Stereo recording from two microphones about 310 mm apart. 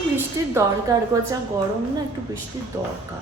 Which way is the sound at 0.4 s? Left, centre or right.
Centre.